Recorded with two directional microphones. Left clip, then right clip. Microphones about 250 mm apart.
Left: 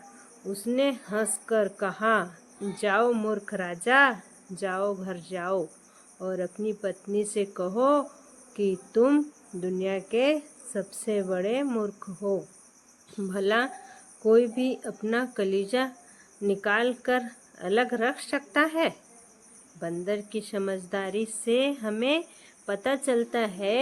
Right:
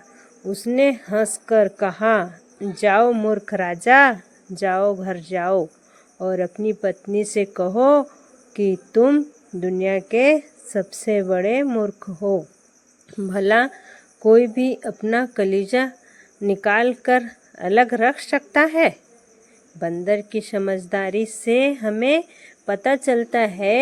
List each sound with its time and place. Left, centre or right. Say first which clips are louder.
0.5 s a woman's voice: right 9 dB; right